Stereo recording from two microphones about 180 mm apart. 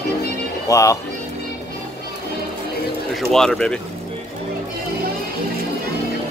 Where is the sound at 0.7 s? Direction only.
20° left (ahead or behind).